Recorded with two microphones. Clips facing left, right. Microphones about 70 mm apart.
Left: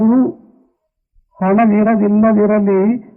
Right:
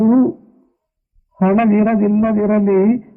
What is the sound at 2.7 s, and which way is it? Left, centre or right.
Music, centre.